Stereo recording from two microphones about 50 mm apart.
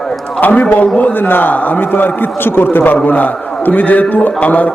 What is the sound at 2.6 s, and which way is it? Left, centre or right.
A man's voice, left.